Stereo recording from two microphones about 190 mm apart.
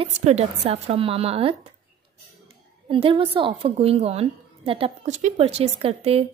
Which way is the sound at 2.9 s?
30° right (ahead or behind).